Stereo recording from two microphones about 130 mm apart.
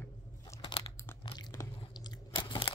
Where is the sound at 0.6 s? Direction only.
40° left (ahead or behind).